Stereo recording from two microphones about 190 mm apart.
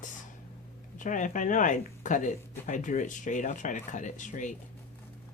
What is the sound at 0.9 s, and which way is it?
Speech, 40° left (ahead or behind).